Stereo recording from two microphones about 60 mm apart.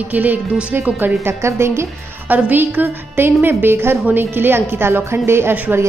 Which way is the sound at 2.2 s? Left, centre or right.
Right.